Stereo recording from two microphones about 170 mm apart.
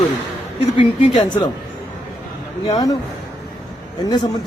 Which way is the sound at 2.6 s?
25° left (ahead or behind).